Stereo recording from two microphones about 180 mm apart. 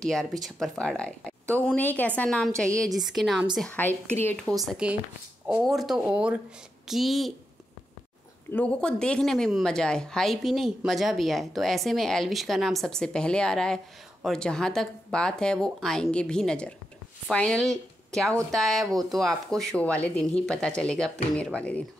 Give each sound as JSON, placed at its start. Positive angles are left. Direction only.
{"t": 0.0, "sound": "a woman's voice", "side_deg": 0}
{"t": 4.6, "sound": "speech", "side_deg": -5}
{"t": 8.5, "sound": "speech", "side_deg": 10}
{"t": 18.9, "sound": "speech", "side_deg": -20}
{"t": 19.1, "sound": "a woman's voice", "side_deg": 0}